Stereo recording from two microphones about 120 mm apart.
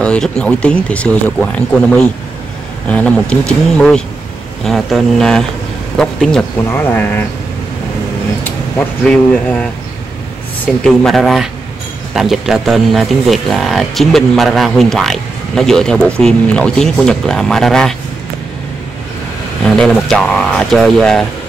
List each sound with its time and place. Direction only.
0.0 s speech: 5° left (ahead or behind)
6.7 s speech: 15° left (ahead or behind)
8.7 s speech: 10° left (ahead or behind)
10.8 s speech: 5° left (ahead or behind)
19.6 s speech: 5° left (ahead or behind)